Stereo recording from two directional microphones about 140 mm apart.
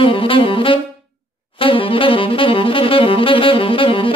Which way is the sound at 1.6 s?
40° left (ahead or behind).